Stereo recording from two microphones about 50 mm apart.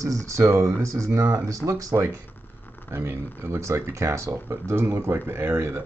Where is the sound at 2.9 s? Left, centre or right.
Right.